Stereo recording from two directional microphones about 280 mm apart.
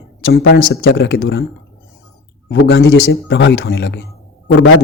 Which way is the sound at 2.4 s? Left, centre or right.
Left.